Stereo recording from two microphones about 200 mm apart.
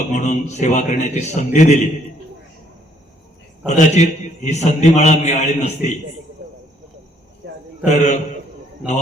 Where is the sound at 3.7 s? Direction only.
35° left (ahead or behind).